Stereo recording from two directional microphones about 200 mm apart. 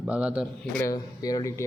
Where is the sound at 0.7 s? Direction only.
15° left (ahead or behind).